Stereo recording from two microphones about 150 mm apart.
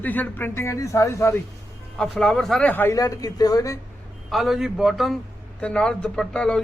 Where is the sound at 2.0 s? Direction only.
5° left (ahead or behind); by 3.8 s 20° left (ahead or behind).